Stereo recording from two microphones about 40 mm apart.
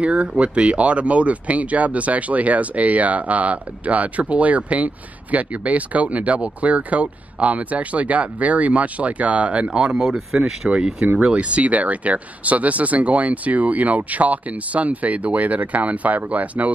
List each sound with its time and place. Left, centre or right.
0.0 s speech: right
9.9 s speech: centre
11.1 s speech: right